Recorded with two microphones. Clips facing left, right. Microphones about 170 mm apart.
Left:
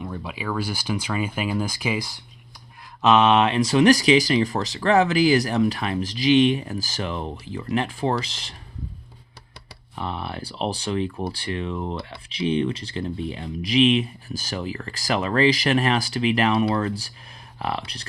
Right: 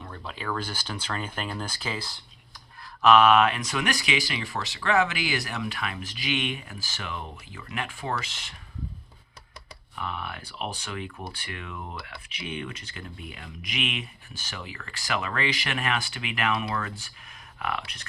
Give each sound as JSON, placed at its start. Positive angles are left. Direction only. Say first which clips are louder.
{"t": 0.0, "sound": "speech", "louder": "left 6 dB", "side_deg": 10}
{"t": 3.0, "sound": "speech", "louder": "left 1 dB", "side_deg": 20}
{"t": 9.9, "sound": "speech", "louder": "left 5 dB", "side_deg": 30}